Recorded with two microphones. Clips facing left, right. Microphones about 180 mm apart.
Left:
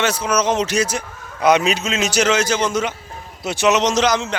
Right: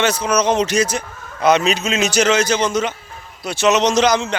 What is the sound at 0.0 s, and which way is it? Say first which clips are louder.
A man's voice: right 2 dB; 5° left (ahead or behind).